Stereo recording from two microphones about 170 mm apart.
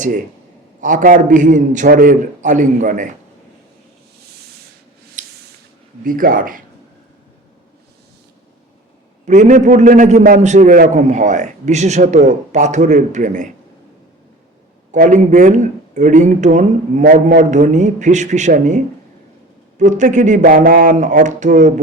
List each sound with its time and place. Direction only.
0.8 s speech: 50° right (ahead or behind)
5.2 s spray: 45° right (ahead or behind)
6.0 s speech: 55° right (ahead or behind)
9.2 s speech: 45° right (ahead or behind)
14.9 s speech: 50° right (ahead or behind)
19.8 s speech: 45° right (ahead or behind)